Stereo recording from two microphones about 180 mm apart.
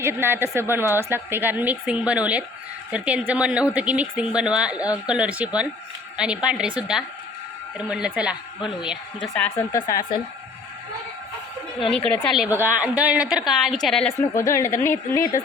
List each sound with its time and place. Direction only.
0.0 s a woman's voice: 15° right (ahead or behind); by 9.8 s 5° left (ahead or behind)
12.1 s a woman's voice: centre (ahead or behind)
12.5 s a woman's voice: 10° right (ahead or behind)
14.2 s a woman's voice: 15° left (ahead or behind)